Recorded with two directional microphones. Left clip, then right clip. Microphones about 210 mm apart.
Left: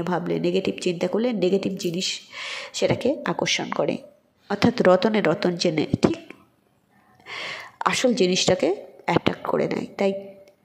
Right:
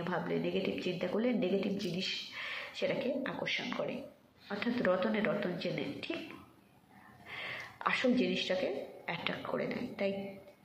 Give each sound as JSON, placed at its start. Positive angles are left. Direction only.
{"t": 0.0, "sound": "speech", "side_deg": 45}
{"t": 7.2, "sound": "speech", "side_deg": 50}